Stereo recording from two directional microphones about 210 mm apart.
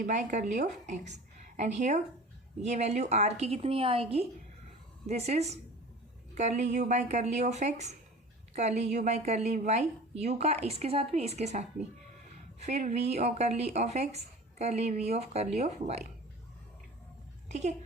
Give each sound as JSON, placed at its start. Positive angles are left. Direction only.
{"t": 0.0, "sound": "a woman's voice", "side_deg": -35}
{"t": 5.0, "sound": "a woman's voice", "side_deg": -30}
{"t": 17.5, "sound": "a woman's voice", "side_deg": -35}